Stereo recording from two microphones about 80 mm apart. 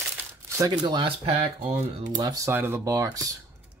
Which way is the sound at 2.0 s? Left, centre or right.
Right.